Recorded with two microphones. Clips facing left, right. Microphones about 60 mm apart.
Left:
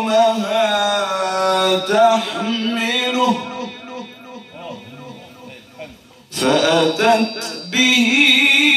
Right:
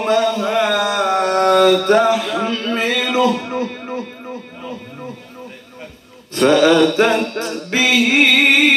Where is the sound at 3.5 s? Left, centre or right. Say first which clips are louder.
Right 5 dB; right.